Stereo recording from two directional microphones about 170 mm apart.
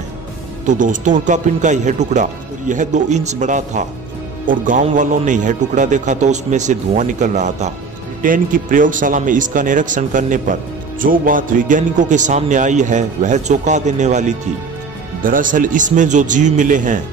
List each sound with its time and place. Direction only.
0.7 s speech: 50° right (ahead or behind)